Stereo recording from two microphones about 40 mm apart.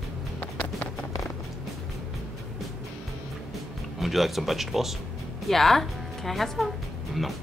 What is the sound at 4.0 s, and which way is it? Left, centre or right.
Speech, centre.